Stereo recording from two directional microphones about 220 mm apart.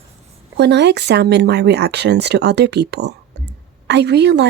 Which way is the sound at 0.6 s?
50° right (ahead or behind).